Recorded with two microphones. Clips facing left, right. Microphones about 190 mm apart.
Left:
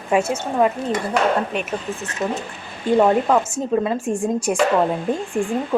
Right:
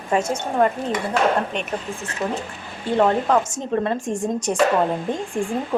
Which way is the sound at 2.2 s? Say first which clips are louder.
Left 1 dB; 15° left (ahead or behind).